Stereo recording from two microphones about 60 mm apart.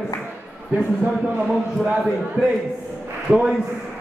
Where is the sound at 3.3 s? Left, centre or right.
Right.